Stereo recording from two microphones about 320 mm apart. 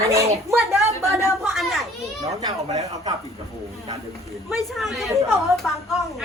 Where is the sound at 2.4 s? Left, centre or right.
Centre.